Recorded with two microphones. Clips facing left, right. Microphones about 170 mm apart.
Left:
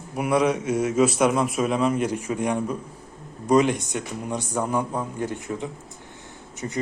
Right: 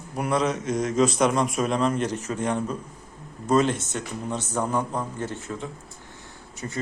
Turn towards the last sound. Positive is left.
turn(degrees=20)  # may be behind; listen again after turning